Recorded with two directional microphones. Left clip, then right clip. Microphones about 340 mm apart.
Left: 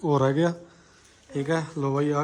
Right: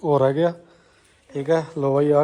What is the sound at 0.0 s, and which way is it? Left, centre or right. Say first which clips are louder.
A man's voice: right 5 dB; centre.